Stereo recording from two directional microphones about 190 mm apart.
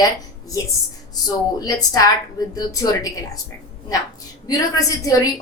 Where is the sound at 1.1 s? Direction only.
20° left (ahead or behind).